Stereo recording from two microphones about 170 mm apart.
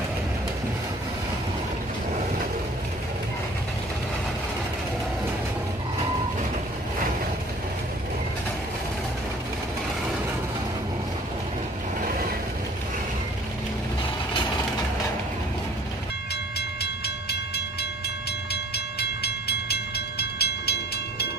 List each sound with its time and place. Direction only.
16.5 s train: 75° left (ahead or behind)
18.5 s train: 75° left (ahead or behind)